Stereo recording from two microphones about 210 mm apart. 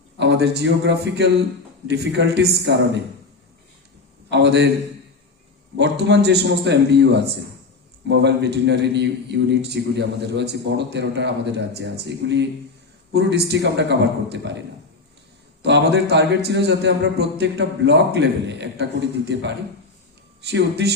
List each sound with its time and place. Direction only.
0.2 s a man's voice: 55° right (ahead or behind)
4.3 s a man's voice: 55° right (ahead or behind)
5.7 s a man's voice: 55° right (ahead or behind)
15.6 s a man's voice: 55° right (ahead or behind)